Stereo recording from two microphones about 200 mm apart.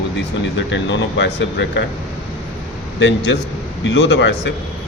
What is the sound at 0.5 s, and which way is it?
Speech, 65° left (ahead or behind).